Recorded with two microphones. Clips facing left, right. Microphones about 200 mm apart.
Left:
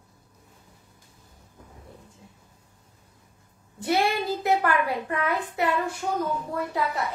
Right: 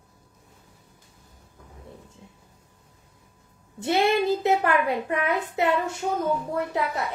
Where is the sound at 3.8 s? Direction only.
25° right (ahead or behind).